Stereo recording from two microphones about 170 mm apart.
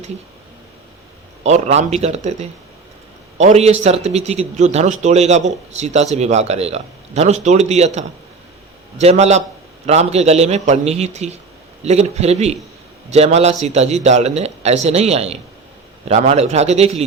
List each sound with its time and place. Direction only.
1.5 s a man's voice: 40° right (ahead or behind)